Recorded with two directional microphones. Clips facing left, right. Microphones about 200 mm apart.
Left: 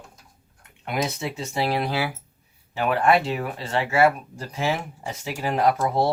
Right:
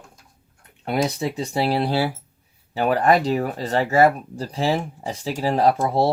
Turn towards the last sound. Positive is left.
turn(degrees=-30)  # may be behind; listen again after turning